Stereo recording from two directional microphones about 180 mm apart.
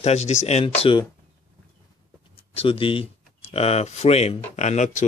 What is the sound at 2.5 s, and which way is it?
Speech, 30° left (ahead or behind).